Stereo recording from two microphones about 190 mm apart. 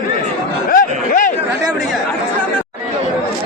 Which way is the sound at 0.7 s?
45° left (ahead or behind).